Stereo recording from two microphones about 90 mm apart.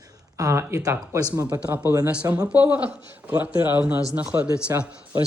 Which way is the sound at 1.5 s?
20° right (ahead or behind).